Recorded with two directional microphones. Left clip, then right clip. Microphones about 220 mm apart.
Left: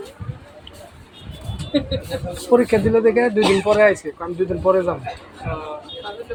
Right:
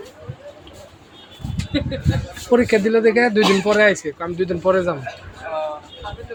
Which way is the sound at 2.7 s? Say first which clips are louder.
Even; 30° right (ahead or behind).